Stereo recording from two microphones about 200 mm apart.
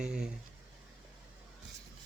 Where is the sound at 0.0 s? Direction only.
5° right (ahead or behind).